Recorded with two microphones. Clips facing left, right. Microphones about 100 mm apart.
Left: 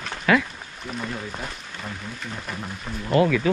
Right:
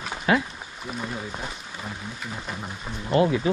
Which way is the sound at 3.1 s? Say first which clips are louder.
Left 1 dB; 25° right (ahead or behind).